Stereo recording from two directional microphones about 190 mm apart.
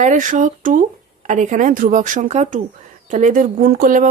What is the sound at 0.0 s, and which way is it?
A woman's voice, 40° right (ahead or behind).